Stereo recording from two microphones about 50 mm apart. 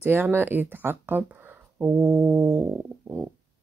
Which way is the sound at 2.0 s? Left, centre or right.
Right.